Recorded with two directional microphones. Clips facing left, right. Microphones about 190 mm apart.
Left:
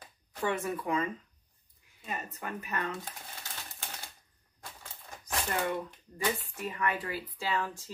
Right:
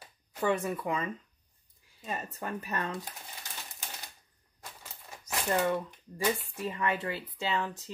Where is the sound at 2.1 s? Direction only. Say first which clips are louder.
Right 2 dB; 35° right (ahead or behind).